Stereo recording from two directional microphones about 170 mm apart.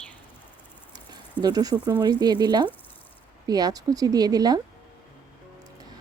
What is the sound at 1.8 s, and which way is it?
Speech, 25° right (ahead or behind).